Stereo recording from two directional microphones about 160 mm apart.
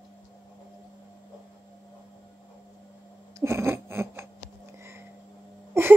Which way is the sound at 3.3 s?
15° right (ahead or behind).